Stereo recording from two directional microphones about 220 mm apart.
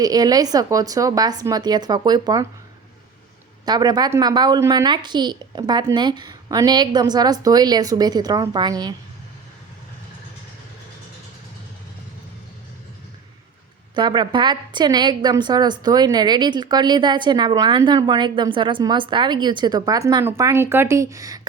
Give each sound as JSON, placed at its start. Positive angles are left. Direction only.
{"t": 0.0, "sound": "a woman's voice", "side_deg": -15}
{"t": 3.7, "sound": "a woman's voice", "side_deg": -20}
{"t": 13.9, "sound": "a woman's voice", "side_deg": -20}